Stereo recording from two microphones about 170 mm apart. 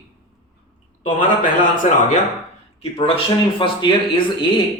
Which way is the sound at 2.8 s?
35° left (ahead or behind).